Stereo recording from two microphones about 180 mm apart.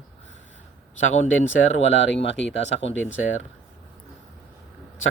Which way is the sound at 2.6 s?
85° left.